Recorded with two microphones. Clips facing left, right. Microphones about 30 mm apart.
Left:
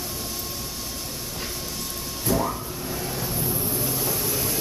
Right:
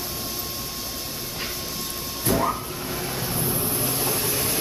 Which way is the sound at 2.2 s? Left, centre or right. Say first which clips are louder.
Right 2 dB; right.